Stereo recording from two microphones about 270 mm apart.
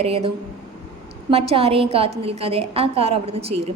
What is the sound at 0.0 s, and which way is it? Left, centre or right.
A woman's voice, right.